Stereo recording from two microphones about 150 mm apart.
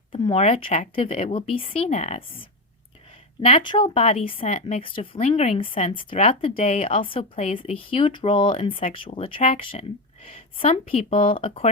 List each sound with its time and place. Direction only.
0.1 s speech: 40° left (ahead or behind)
3.4 s speech: 35° left (ahead or behind)
3.9 s speech: 45° left (ahead or behind)
4.4 s speech: 50° left (ahead or behind)
4.9 s speech: 35° left (ahead or behind)